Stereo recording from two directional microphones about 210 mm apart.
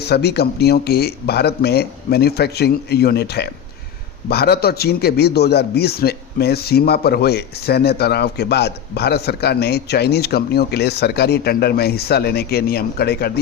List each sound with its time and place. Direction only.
0.0 s a man's voice: 50° left (ahead or behind)